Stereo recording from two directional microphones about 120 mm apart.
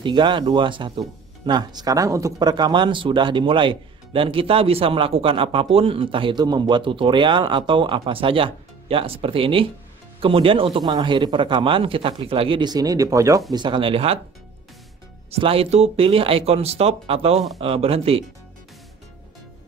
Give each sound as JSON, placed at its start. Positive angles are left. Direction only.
{"t": 0.0, "sound": "speech", "side_deg": -40}
{"t": 10.8, "sound": "speech", "side_deg": -35}
{"t": 13.5, "sound": "speech", "side_deg": -40}
{"t": 15.4, "sound": "speech", "side_deg": -50}